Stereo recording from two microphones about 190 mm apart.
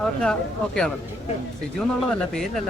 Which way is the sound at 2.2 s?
5° left (ahead or behind).